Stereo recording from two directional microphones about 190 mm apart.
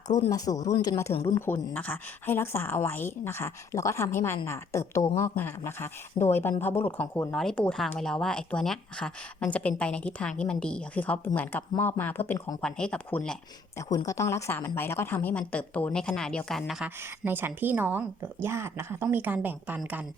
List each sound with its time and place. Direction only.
0.3 s speech: 20° left (ahead or behind)
13.7 s speech: 15° left (ahead or behind); by 16.9 s centre (ahead or behind)
17.0 s a woman's voice: 10° right (ahead or behind)